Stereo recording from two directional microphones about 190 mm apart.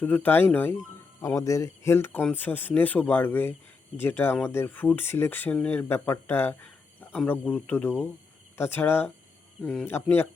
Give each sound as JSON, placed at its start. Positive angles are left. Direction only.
{"t": 0.0, "sound": "speech", "side_deg": 10}